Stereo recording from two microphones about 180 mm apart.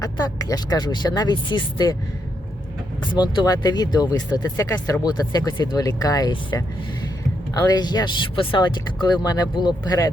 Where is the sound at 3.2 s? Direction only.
20° left (ahead or behind).